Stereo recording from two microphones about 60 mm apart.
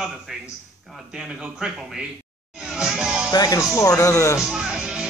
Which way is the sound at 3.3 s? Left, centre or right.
Left.